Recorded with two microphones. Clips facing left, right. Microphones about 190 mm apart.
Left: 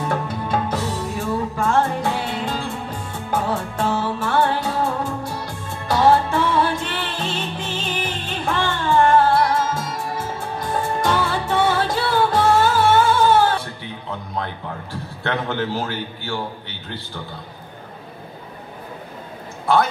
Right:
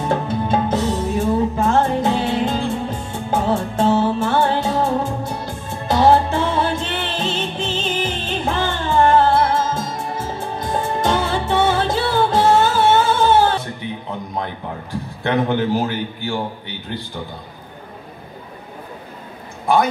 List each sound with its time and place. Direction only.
0.0 s music: 25° right (ahead or behind)
14.3 s a man's voice: 15° right (ahead or behind)